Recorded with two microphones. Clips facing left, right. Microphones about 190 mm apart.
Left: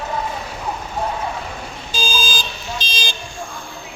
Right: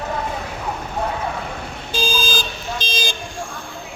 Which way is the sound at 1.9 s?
60° right (ahead or behind).